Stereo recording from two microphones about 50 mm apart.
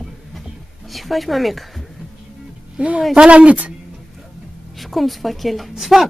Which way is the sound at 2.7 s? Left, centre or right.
Right.